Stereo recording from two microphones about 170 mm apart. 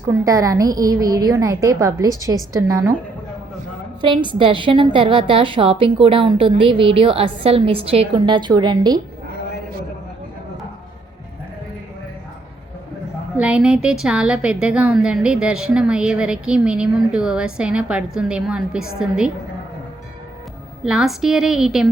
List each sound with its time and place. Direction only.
0.1 s a woman's voice: 20° right (ahead or behind)
4.0 s a woman's voice: 30° right (ahead or behind)
13.3 s a woman's voice: 5° right (ahead or behind)
20.8 s a woman's voice: 5° right (ahead or behind)